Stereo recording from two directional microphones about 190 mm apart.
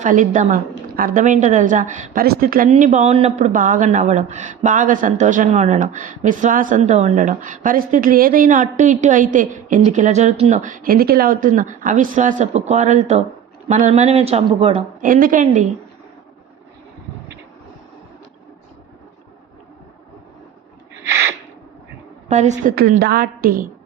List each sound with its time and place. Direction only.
0.0 s speech: 40° right (ahead or behind)
15.0 s a woman's voice: 45° right (ahead or behind)
22.3 s speech: 40° right (ahead or behind)
23.0 s a woman's voice: 55° right (ahead or behind)